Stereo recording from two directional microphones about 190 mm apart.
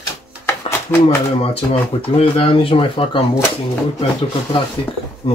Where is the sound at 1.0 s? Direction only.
30° left (ahead or behind).